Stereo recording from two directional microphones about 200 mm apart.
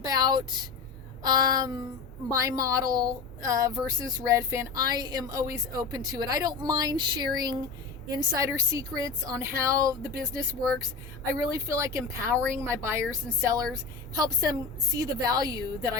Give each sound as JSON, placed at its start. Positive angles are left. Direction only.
{"t": 0.0, "sound": "a woman's voice", "side_deg": -20}
{"t": 11.3, "sound": "a woman's voice", "side_deg": -15}